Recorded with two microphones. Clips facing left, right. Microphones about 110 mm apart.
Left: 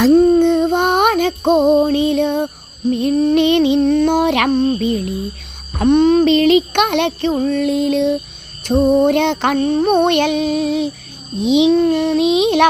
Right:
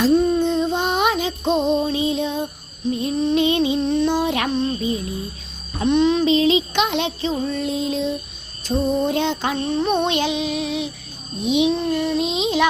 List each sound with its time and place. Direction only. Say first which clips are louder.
0.1 s music: left 7 dB; 55° left (ahead or behind)
3.2 s female singing: left 4 dB; 65° left (ahead or behind)
4.8 s a sound: left 6 dB; 70° left (ahead or behind)
5.8 s child singing: left 6 dB; 50° left (ahead or behind)
11.4 s music: left 6 dB; 90° left
11.8 s child singing: left 7 dB; 65° left (ahead or behind)